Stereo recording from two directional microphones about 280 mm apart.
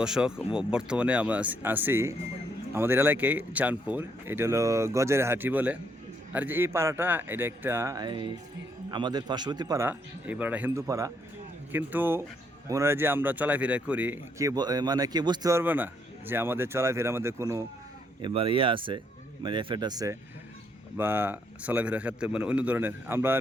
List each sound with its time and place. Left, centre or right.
0.0 s speech: centre